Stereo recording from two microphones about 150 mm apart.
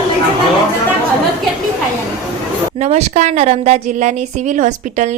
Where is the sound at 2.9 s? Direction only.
50° right (ahead or behind).